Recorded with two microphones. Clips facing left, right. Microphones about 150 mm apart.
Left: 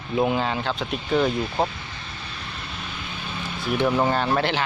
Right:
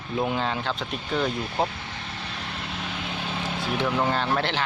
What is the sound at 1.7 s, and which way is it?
Vehicle, 75° right (ahead or behind).